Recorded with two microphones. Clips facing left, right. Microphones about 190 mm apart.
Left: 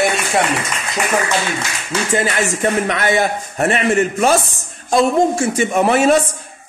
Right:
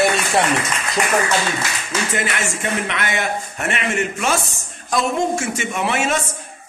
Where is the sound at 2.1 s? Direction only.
35° left (ahead or behind).